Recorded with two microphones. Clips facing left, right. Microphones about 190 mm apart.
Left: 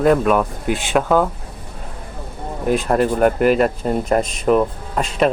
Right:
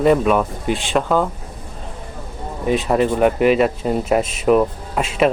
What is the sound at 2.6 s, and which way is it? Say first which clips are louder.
Speech: even; centre (ahead or behind).